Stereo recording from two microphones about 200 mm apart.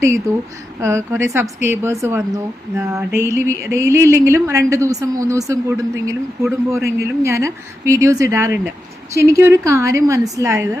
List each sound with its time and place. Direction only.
0.3 s speech: 15° right (ahead or behind)